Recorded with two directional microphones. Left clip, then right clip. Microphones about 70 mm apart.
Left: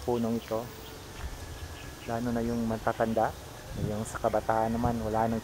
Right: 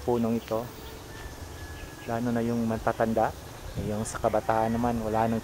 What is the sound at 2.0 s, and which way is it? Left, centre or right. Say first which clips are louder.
Speech: right 3 dB; right.